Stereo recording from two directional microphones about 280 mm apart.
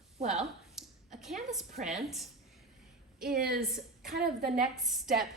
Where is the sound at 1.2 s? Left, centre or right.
Centre.